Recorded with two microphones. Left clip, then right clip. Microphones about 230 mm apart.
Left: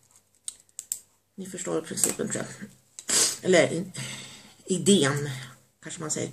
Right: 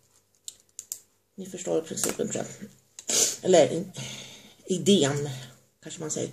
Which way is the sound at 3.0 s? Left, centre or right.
Centre.